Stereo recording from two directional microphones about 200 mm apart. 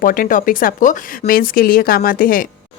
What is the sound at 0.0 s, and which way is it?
Speech, 45° left (ahead or behind).